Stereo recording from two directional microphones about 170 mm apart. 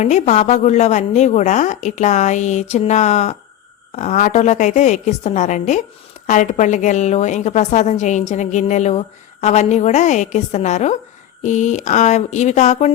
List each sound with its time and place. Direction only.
0.0 s a woman's voice: 45° left (ahead or behind)